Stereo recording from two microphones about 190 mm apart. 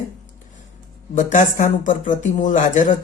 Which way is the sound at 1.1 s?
40° left (ahead or behind).